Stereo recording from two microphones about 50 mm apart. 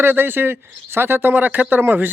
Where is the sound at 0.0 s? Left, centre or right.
Right.